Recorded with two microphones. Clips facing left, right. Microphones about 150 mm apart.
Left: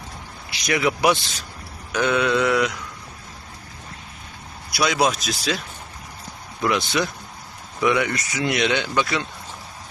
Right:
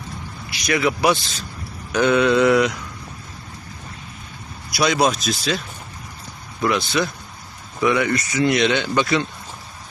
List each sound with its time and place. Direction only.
0.7 s speech: 15° left (ahead or behind)
1.9 s mantra: centre (ahead or behind)
4.7 s speech: 5° left (ahead or behind)